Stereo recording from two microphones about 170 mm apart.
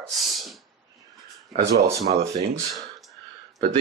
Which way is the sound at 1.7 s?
65° right (ahead or behind).